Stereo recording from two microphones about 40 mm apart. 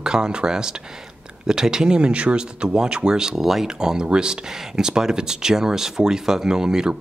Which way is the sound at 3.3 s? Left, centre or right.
Centre.